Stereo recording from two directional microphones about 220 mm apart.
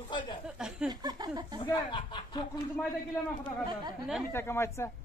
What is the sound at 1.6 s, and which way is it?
Speech, 25° left (ahead or behind).